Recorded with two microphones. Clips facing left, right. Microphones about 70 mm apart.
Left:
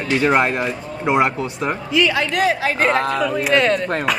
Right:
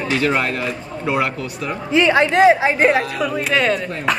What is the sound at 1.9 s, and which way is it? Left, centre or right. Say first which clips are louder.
A woman's voice: right 5 dB; right.